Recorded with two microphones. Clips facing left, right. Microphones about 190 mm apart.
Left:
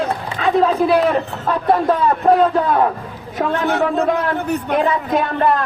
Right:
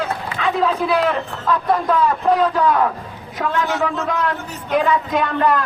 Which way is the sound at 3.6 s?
55° left (ahead or behind).